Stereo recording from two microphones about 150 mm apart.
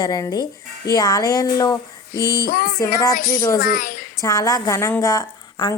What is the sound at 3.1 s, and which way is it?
Speech, 65° left (ahead or behind).